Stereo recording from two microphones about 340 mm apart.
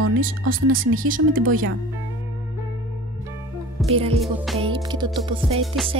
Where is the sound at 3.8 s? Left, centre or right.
Centre.